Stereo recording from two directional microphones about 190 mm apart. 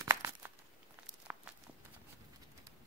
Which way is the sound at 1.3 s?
10° right (ahead or behind).